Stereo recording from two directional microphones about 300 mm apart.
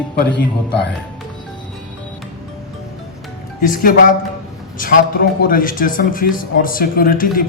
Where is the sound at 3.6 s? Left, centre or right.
Left.